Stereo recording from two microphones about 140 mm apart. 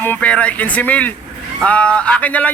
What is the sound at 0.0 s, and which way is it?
Speech, 10° left (ahead or behind).